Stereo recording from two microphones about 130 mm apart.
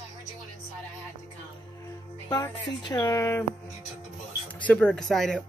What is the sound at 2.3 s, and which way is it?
Speech, 35° left (ahead or behind).